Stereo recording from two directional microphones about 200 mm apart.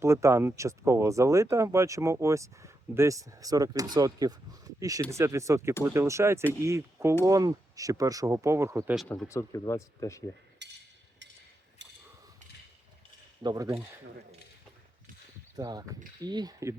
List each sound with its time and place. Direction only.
0.0 s speech: 15° right (ahead or behind)
9.0 s speech: centre (ahead or behind)
9.3 s speech: 15° left (ahead or behind)
10.6 s a sound: 60° right (ahead or behind)
11.8 s a sound: 60° right (ahead or behind)
13.4 s speech: 20° right (ahead or behind)
15.5 s speech: 20° right (ahead or behind)